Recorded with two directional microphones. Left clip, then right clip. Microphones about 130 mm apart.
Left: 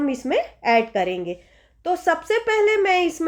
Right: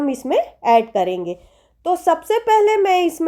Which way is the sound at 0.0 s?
45° right (ahead or behind).